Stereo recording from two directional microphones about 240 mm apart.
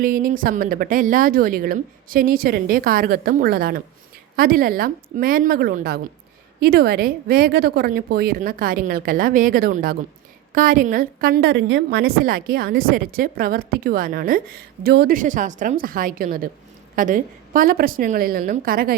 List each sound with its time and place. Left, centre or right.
0.0 s a woman's voice: right